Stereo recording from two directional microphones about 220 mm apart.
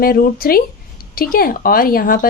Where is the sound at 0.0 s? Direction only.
40° left (ahead or behind).